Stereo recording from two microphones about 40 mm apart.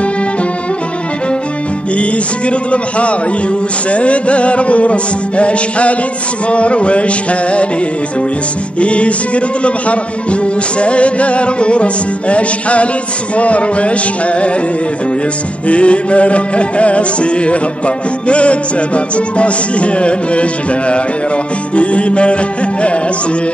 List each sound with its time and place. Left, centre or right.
2.7 s music: left
8.7 s music: left
15.7 s music: left
21.7 s music: left